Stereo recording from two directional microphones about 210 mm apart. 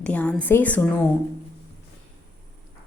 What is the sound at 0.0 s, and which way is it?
A woman's voice, 5° left (ahead or behind).